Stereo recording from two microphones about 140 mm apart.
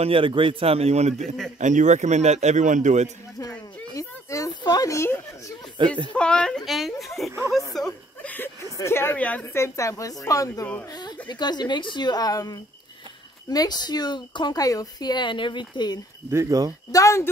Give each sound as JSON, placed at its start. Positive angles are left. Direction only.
{"t": 0.0, "sound": "speech", "side_deg": -40}
{"t": 1.2, "sound": "speech", "side_deg": 0}
{"t": 1.6, "sound": "a man's voice", "side_deg": -60}
{"t": 3.3, "sound": "a sound", "side_deg": 25}
{"t": 5.8, "sound": "speech", "side_deg": -35}
{"t": 6.1, "sound": "speech", "side_deg": 5}
{"t": 7.5, "sound": "a sound", "side_deg": 0}
{"t": 8.7, "sound": "speech", "side_deg": 20}
{"t": 16.3, "sound": "speech", "side_deg": -20}
{"t": 16.9, "sound": "speech", "side_deg": 20}